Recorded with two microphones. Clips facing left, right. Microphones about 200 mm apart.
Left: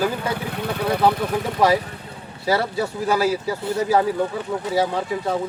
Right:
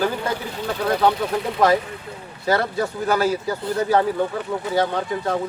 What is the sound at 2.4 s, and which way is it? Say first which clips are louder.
Speech: even; 10° left (ahead or behind).